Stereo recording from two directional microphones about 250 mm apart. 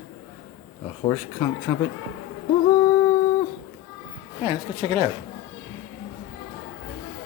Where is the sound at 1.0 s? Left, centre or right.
Centre.